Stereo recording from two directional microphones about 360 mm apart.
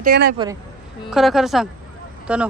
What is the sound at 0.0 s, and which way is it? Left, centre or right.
Speech, right.